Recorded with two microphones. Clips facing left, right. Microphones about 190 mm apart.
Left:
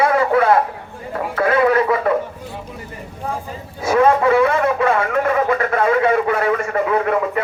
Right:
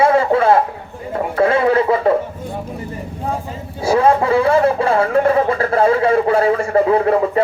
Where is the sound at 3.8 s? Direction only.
30° right (ahead or behind).